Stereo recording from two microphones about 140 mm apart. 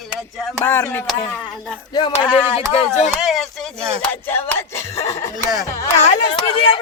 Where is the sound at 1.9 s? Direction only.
35° left (ahead or behind).